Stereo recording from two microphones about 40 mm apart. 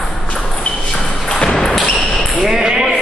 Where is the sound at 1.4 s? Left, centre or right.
Centre.